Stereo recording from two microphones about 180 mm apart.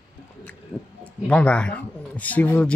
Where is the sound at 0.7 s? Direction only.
5° left (ahead or behind).